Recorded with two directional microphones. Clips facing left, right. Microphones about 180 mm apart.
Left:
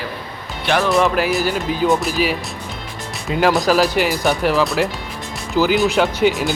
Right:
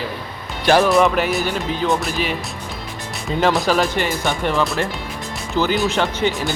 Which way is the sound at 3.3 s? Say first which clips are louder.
Left 2 dB; 5° left (ahead or behind).